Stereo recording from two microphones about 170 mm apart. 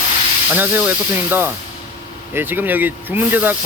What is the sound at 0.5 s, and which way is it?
Speech, 10° right (ahead or behind).